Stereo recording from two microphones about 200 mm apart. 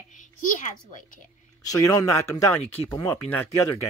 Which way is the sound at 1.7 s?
15° left (ahead or behind).